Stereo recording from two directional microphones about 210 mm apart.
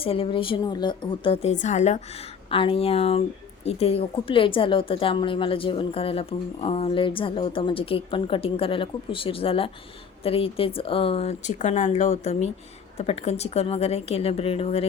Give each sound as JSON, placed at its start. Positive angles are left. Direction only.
{"t": 0.0, "sound": "a woman's voice", "side_deg": 25}